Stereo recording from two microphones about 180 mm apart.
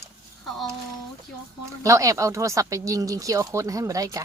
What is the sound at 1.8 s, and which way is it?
Speech, 15° right (ahead or behind).